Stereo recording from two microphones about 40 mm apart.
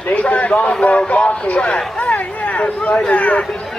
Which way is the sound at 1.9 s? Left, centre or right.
Left.